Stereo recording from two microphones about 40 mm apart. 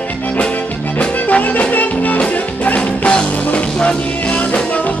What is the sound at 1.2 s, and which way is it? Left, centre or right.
Music, left.